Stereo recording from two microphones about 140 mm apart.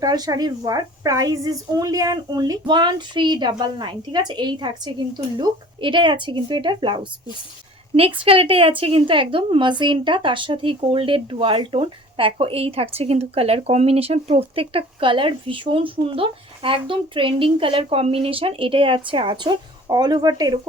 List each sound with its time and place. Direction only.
0.0 s a woman's voice: 30° right (ahead or behind)